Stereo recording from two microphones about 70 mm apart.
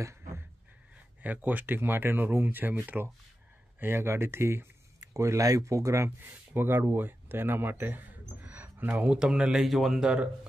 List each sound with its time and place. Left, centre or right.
1.2 s speech: right
6.0 s speech: right
9.0 s speech: centre